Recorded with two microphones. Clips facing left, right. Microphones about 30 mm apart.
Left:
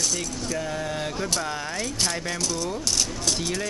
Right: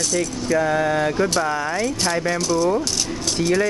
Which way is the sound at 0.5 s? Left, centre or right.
Right.